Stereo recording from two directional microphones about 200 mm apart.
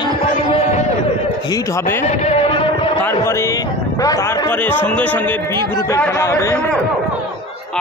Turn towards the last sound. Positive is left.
turn(degrees=10)  # may be behind; listen again after turning